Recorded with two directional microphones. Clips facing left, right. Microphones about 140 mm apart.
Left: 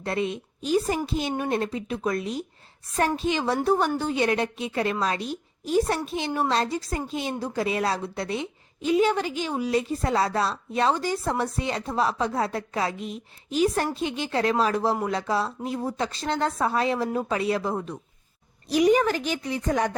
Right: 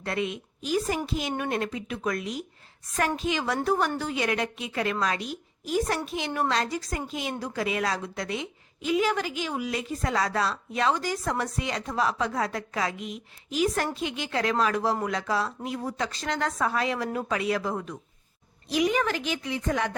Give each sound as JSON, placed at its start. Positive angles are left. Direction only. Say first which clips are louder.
{"t": 0.0, "sound": "a woman's voice", "louder": "left 3 dB", "side_deg": 30}